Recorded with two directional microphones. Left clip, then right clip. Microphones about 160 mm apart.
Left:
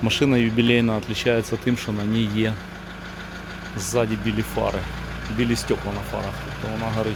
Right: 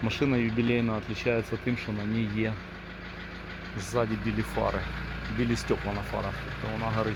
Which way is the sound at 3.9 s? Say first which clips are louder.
Left 6 dB; 20° left (ahead or behind).